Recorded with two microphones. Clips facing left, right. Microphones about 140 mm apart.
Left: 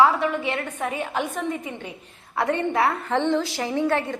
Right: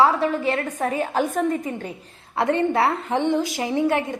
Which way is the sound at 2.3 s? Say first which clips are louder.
Right 3 dB; 30° right (ahead or behind).